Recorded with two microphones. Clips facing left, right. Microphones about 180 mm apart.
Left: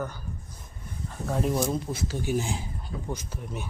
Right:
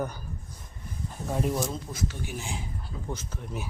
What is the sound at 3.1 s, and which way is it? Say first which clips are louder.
Speech: even; 10° left (ahead or behind).